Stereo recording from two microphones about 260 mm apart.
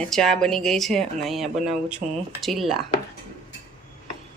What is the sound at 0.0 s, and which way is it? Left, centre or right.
Speech, centre.